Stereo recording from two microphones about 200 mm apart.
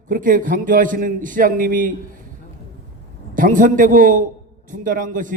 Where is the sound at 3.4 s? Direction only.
45° right (ahead or behind).